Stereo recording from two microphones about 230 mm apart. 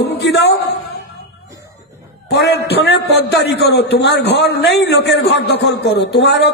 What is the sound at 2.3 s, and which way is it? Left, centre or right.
A man's voice, left.